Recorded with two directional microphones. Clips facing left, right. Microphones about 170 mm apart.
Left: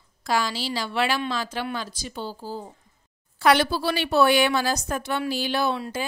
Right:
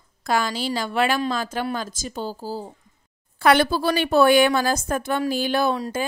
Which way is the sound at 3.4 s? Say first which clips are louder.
Right 2 dB; 50° right (ahead or behind).